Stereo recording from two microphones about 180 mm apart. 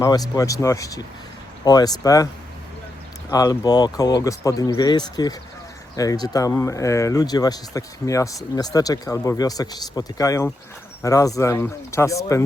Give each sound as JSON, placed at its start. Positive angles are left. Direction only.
{"t": 0.0, "sound": "speech", "side_deg": 20}
{"t": 3.2, "sound": "speech", "side_deg": 20}